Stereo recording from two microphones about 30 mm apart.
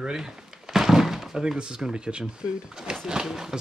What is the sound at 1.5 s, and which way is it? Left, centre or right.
Speech, right.